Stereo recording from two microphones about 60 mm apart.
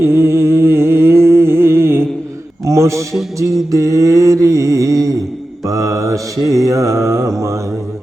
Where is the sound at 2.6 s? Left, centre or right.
Right.